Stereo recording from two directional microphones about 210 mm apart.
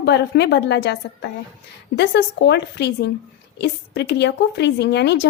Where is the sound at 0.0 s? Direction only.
55° left (ahead or behind).